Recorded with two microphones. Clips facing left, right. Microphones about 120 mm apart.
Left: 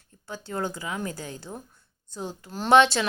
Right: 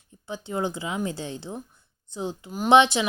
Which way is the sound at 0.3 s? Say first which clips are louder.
Right 3 dB; 20° right (ahead or behind).